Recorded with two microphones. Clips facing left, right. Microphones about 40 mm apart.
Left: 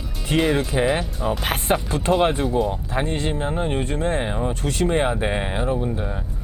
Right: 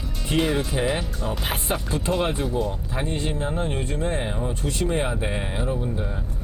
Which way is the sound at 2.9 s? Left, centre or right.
Left.